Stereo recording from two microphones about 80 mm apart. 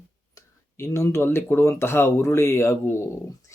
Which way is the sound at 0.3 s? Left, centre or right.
Left.